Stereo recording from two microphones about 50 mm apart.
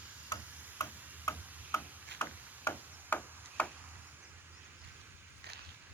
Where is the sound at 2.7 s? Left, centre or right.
Left.